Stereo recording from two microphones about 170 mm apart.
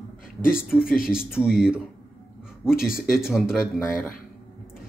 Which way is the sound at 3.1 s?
Centre (ahead or behind).